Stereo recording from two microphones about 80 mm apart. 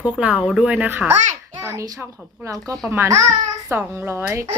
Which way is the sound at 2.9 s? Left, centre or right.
Right.